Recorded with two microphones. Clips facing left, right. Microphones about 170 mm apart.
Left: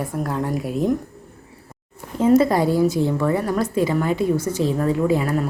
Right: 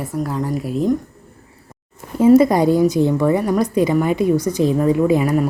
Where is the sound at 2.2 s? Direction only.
15° right (ahead or behind).